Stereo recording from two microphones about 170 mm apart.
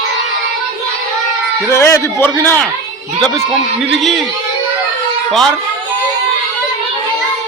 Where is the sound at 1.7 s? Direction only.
15° left (ahead or behind).